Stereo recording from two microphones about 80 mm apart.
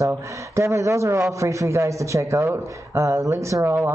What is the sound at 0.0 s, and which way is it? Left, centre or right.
Speech, right.